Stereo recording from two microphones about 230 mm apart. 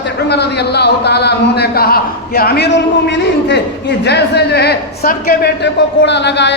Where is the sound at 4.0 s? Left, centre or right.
Left.